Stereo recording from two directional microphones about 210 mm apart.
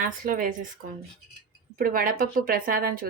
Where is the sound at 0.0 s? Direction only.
40° right (ahead or behind).